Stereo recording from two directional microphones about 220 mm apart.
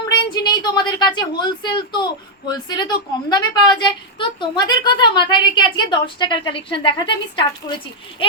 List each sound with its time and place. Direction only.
0.1 s a woman's voice: 20° left (ahead or behind)